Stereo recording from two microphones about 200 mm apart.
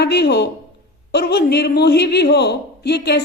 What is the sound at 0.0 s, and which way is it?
A woman's voice, 55° left (ahead or behind).